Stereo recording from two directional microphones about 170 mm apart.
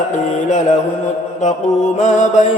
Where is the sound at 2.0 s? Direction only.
45° left (ahead or behind).